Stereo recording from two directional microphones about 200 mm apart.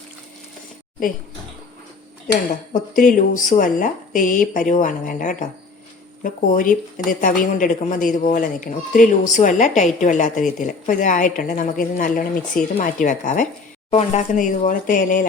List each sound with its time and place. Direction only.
2.7 s a woman's voice: 40° left (ahead or behind)